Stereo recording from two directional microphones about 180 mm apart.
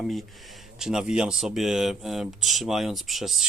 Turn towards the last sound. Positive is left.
turn(degrees=0)  # may be behind; listen again after turning